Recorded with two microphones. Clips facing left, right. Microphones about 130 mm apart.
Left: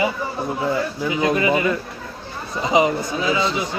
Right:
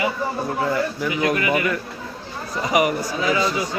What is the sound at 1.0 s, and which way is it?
Speech, 25° left (ahead or behind).